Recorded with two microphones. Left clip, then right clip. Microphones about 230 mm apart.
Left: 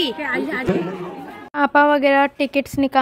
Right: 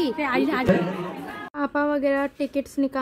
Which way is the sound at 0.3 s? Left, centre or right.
Right.